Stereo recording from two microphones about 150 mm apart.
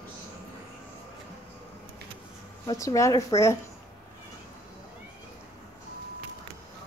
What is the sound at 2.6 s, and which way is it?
Speech, 25° left (ahead or behind).